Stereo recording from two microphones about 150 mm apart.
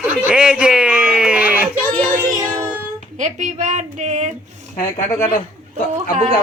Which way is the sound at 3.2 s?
55° right (ahead or behind).